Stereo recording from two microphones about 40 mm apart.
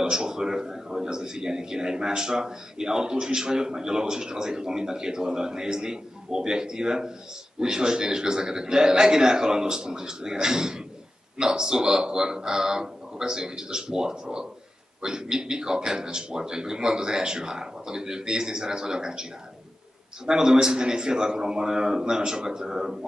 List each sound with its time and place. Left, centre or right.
0.0 s a man's voice: centre
20.2 s a man's voice: centre